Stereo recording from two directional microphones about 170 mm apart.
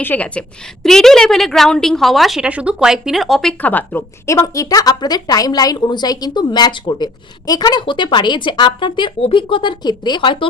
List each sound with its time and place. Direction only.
0.0 s a woman's voice: 10° left (ahead or behind)
3.6 s a woman's voice: 10° left (ahead or behind); by 10.3 s 25° left (ahead or behind)